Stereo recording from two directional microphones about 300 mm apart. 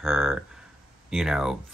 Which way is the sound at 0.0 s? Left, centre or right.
Centre.